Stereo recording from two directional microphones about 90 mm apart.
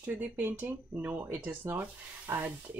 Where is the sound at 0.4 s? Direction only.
20° right (ahead or behind).